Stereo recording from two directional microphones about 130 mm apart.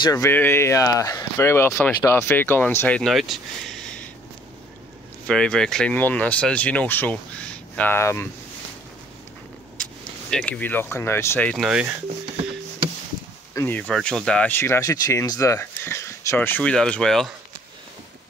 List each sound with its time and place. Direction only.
0.0 s speech: 25° left (ahead or behind)
3.0 s speech: centre (ahead or behind)
5.2 s speech: 5° left (ahead or behind)
10.3 s speech: 10° left (ahead or behind)
11.5 s speech: 5° right (ahead or behind)
13.6 s speech: 15° left (ahead or behind)
13.9 s speech: 5° left (ahead or behind)